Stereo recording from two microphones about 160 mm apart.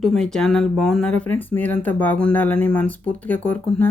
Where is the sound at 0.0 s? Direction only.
5° left (ahead or behind).